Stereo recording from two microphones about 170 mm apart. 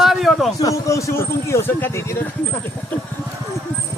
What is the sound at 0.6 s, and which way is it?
Speech, 20° left (ahead or behind).